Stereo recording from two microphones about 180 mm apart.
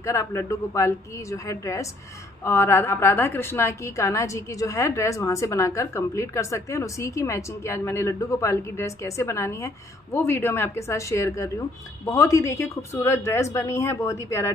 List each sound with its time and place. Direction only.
0.0 s a woman's voice: 15° left (ahead or behind)